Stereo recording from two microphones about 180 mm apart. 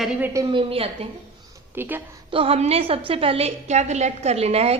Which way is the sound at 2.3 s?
30° right (ahead or behind).